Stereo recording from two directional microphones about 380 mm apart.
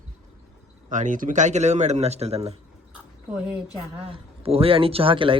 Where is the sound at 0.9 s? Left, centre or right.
Centre.